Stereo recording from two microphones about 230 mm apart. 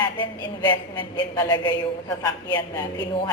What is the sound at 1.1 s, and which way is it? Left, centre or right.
A man's voice, centre.